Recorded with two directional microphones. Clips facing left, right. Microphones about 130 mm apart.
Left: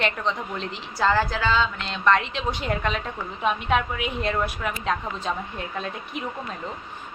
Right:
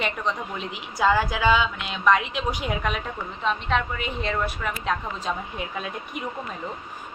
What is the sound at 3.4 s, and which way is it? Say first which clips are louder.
A woman's voice: left 2 dB; 10° left (ahead or behind).